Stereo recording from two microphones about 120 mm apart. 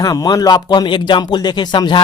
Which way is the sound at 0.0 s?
30° left (ahead or behind).